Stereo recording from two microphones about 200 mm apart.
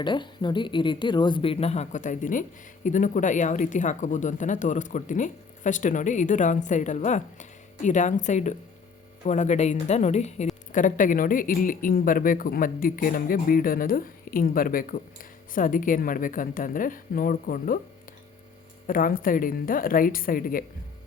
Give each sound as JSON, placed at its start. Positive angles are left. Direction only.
{"t": 0.0, "sound": "speech", "side_deg": 25}
{"t": 18.9, "sound": "speech", "side_deg": 45}